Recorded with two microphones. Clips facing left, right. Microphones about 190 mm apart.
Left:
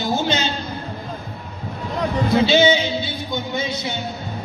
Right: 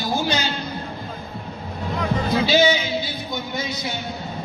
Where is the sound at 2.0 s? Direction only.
25° left (ahead or behind).